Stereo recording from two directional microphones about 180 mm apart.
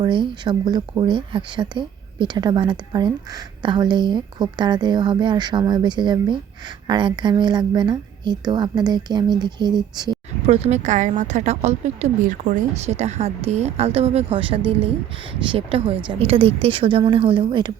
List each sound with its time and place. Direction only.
0.0 s speech: 25° right (ahead or behind)
10.4 s speech: 35° right (ahead or behind)